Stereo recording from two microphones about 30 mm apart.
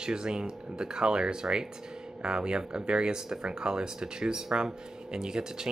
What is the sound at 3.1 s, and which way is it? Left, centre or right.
Speech, centre.